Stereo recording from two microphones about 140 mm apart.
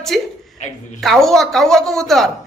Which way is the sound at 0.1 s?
Centre (ahead or behind).